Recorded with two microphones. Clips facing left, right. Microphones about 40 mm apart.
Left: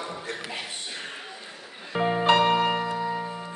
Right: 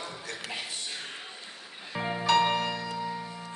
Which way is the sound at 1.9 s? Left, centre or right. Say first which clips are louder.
Left 4 dB; left.